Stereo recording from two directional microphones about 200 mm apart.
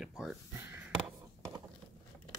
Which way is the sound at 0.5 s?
10° right (ahead or behind).